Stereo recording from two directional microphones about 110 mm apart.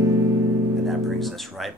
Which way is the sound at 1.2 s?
Centre (ahead or behind).